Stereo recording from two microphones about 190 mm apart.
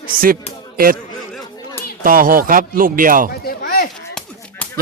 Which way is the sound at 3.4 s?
50° left (ahead or behind).